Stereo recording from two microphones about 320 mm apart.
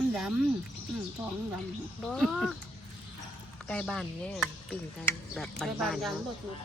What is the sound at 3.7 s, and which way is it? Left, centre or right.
Speech, centre.